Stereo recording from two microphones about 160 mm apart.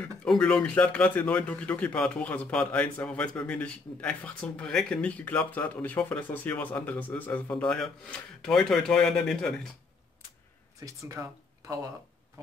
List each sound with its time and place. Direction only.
0.2 s speech: 5° left (ahead or behind)
10.8 s speech: 20° right (ahead or behind)